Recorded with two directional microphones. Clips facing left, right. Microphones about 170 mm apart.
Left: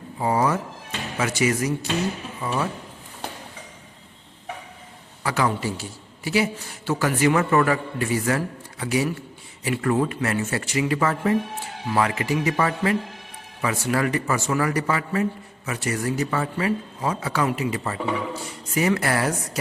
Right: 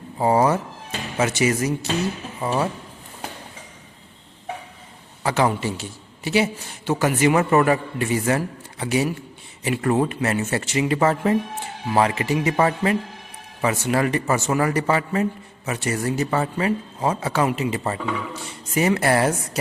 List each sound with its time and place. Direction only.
0.2 s a man's voice: 30° right (ahead or behind)
5.2 s a man's voice: 25° right (ahead or behind)